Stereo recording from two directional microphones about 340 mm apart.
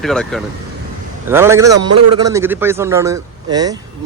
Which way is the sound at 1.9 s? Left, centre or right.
Right.